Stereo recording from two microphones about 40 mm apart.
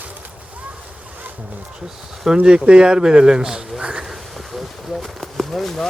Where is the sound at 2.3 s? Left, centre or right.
Right.